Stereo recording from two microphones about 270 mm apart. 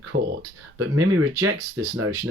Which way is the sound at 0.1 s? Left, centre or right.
Right.